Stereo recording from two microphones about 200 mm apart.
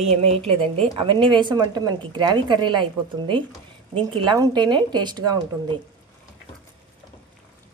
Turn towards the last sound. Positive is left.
turn(degrees=-20)  # may be behind; listen again after turning